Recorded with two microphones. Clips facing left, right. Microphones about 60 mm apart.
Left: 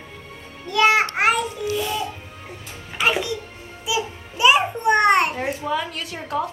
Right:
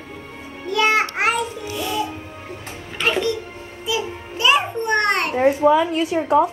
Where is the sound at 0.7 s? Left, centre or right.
Centre.